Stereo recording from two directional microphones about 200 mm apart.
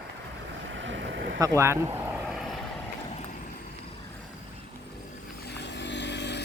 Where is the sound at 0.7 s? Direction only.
65° right (ahead or behind).